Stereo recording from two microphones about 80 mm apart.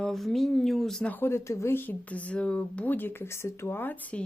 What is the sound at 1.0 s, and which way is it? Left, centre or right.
Speech, left.